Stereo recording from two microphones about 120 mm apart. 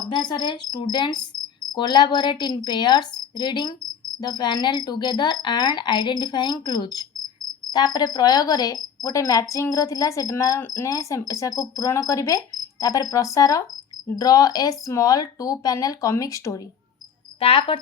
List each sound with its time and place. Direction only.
0.1 s cricket: 40° left (ahead or behind)
17.4 s speech: 50° left (ahead or behind)